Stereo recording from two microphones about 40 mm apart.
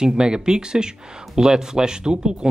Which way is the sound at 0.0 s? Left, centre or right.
Centre.